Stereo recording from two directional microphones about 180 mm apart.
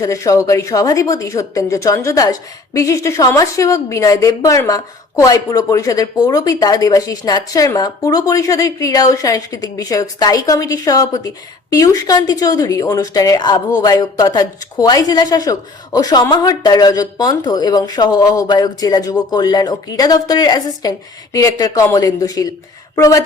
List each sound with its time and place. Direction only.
0.0 s a woman's voice: 15° left (ahead or behind)